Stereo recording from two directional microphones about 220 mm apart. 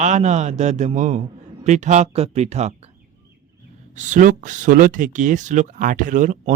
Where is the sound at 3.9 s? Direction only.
35° right (ahead or behind).